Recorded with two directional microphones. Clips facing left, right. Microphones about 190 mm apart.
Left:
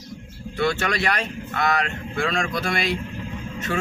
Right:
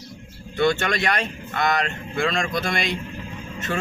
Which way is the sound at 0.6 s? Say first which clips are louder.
Right 2 dB; 5° left (ahead or behind).